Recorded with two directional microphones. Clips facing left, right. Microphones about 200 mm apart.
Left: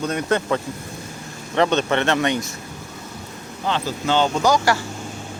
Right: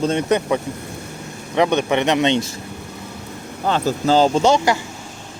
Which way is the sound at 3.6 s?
45° right (ahead or behind).